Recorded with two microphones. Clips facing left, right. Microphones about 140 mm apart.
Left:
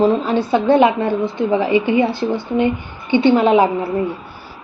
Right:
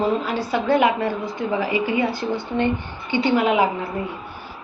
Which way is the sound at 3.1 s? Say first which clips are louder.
Left 6 dB; 25° left (ahead or behind).